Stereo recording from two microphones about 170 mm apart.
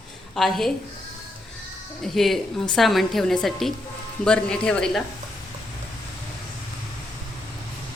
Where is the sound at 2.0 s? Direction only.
Centre (ahead or behind).